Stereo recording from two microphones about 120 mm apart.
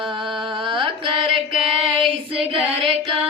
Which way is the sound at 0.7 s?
45° right (ahead or behind).